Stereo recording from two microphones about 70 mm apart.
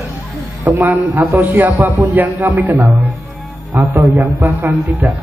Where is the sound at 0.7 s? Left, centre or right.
Right.